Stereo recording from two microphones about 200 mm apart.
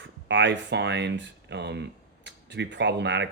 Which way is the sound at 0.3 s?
65° right (ahead or behind).